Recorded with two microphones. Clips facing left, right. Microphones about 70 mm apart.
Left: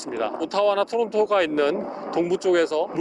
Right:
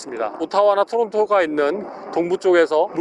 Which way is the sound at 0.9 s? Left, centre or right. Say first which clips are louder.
Right 3 dB; right.